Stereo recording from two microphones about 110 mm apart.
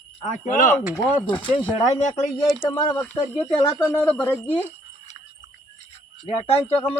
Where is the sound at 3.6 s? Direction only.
25° left (ahead or behind).